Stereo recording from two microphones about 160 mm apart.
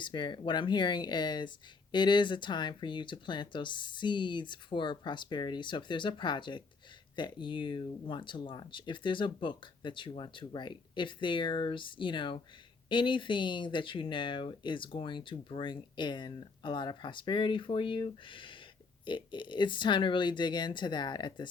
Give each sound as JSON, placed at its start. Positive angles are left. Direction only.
{"t": 0.0, "sound": "speech", "side_deg": 30}